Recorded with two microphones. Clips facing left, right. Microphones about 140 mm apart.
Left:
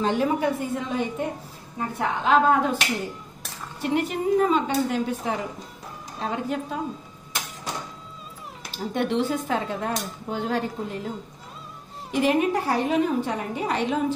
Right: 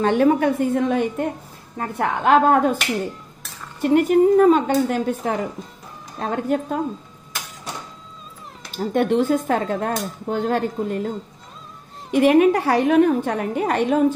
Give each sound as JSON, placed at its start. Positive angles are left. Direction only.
{"t": 0.0, "sound": "a woman's voice", "side_deg": -60}
{"t": 3.9, "sound": "speech", "side_deg": -50}
{"t": 8.7, "sound": "speech", "side_deg": -50}
{"t": 12.1, "sound": "a woman's voice", "side_deg": -60}